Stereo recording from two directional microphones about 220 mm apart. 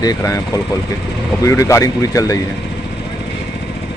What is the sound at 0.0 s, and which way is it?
Speech, 15° left (ahead or behind).